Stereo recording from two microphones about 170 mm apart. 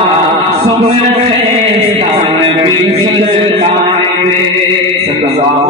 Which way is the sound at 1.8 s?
35° right (ahead or behind).